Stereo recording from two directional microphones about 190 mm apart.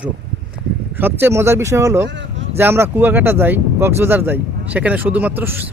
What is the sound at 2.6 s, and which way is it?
Speech, 10° right (ahead or behind).